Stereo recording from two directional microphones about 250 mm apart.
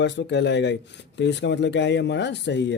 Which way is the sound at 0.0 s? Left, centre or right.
Left.